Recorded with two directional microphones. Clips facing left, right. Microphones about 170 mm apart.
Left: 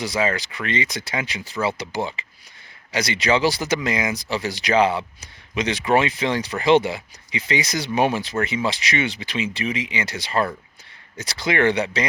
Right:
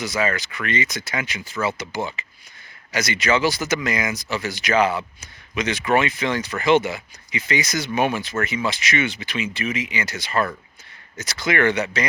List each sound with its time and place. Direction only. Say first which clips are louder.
0.0 s speech: left 1 dB; 30° left (ahead or behind)